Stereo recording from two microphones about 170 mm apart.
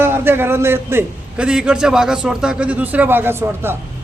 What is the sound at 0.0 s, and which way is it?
A man's voice, 15° right (ahead or behind).